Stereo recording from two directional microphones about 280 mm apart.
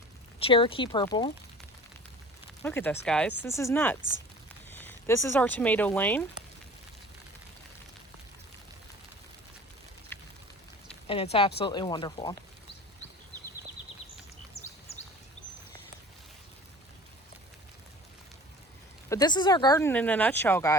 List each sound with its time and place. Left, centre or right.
0.3 s speech: centre
2.6 s speech: centre
10.1 s a sound: centre
11.0 s speech: centre
19.0 s speech: centre